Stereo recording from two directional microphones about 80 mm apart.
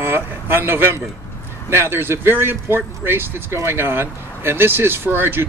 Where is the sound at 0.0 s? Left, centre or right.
Right.